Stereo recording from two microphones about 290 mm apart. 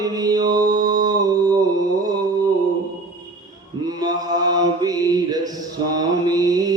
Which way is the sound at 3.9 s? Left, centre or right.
Centre.